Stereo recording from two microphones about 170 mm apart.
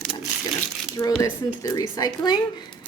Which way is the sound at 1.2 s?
25° left (ahead or behind).